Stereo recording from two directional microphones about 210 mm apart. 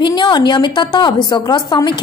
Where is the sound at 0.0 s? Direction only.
20° left (ahead or behind).